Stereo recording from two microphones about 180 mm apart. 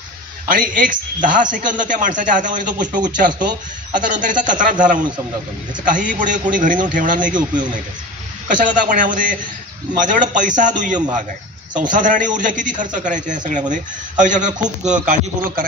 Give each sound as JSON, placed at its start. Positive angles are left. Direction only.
{"t": 0.5, "sound": "a man's voice", "side_deg": -45}
{"t": 8.5, "sound": "a man's voice", "side_deg": -45}